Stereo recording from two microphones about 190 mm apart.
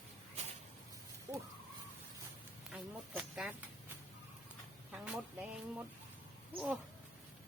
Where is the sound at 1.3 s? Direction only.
15° right (ahead or behind).